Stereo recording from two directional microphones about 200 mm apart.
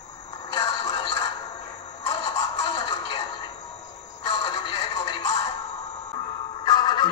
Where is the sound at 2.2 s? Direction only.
20° left (ahead or behind).